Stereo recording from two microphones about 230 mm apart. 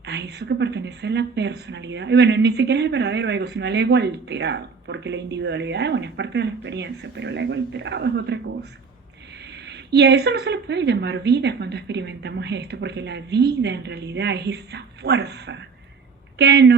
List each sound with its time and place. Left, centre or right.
0.0 s a woman's voice: right
9.6 s a woman's voice: right